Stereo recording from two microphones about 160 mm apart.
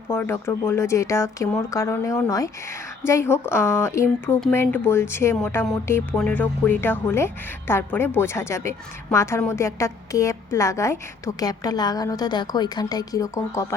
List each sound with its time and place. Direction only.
0.1 s a woman's voice: 15° left (ahead or behind)